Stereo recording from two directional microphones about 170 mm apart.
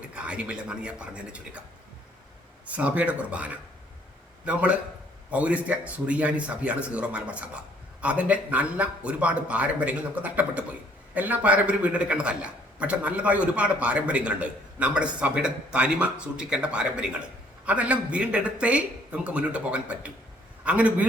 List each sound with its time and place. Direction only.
0.0 s a man's voice: 5° right (ahead or behind)
2.6 s a man's voice: 10° right (ahead or behind)